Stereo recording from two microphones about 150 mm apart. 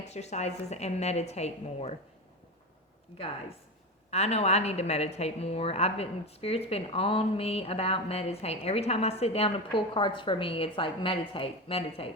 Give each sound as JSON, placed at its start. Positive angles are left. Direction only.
{"t": 0.0, "sound": "a woman's voice", "side_deg": 50}
{"t": 4.1, "sound": "a woman's voice", "side_deg": 45}